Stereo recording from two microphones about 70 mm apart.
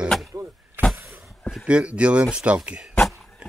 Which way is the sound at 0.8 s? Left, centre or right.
Right.